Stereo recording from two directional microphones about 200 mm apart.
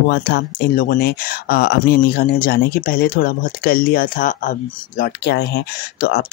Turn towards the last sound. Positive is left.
turn(degrees=50)  # may be behind; listen again after turning